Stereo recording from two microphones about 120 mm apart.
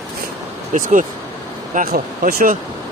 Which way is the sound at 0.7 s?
90° right.